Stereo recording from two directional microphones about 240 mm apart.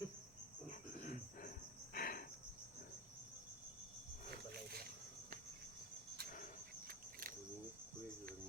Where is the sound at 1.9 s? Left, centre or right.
Left.